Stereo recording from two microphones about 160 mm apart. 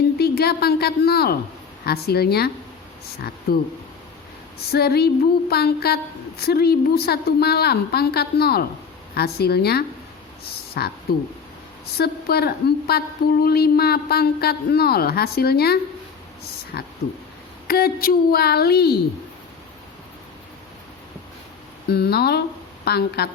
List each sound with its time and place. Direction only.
0.2 s a woman's voice: 80° left
4.7 s a man's voice: 80° left
11.9 s a woman's voice: 80° left
16.7 s speech: 90° left
17.7 s a woman's voice: 75° left (ahead or behind)
21.8 s speech: 85° left